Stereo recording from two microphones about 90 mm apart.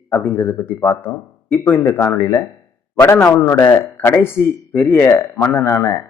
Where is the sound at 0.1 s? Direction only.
25° left (ahead or behind).